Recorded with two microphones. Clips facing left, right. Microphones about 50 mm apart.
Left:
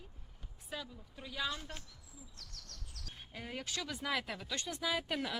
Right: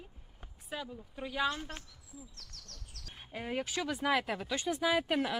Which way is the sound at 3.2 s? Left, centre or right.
Right.